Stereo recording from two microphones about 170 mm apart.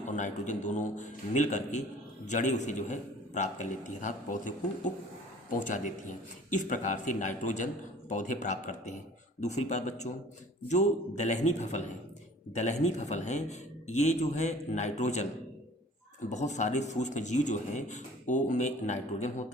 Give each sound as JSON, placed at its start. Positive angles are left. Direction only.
{"t": 0.2, "sound": "speech", "side_deg": 45}
{"t": 16.3, "sound": "speech", "side_deg": 45}